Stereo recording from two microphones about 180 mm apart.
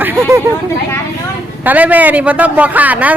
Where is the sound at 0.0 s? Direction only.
10° right (ahead or behind).